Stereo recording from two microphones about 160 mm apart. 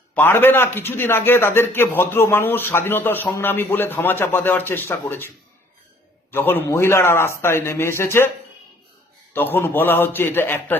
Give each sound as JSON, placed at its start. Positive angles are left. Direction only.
{"t": 0.1, "sound": "a man's voice", "side_deg": 15}
{"t": 6.3, "sound": "a man's voice", "side_deg": 15}
{"t": 9.3, "sound": "a man's voice", "side_deg": 15}